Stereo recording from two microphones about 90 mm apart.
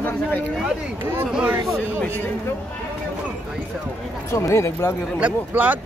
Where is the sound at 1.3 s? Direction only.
15° right (ahead or behind).